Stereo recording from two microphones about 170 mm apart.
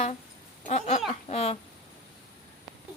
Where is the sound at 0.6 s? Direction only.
45° left (ahead or behind).